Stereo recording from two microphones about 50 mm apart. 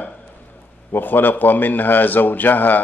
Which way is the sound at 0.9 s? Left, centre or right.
Left.